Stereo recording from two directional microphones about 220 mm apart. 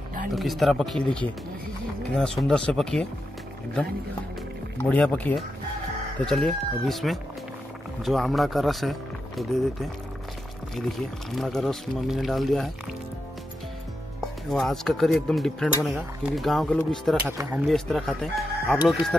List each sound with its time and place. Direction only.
0.3 s speech: centre (ahead or behind)
4.7 s speech: 5° left (ahead or behind)
10.9 s speech: centre (ahead or behind)
14.2 s speech: centre (ahead or behind)
17.3 s speech: 10° right (ahead or behind)
17.6 s speech: centre (ahead or behind)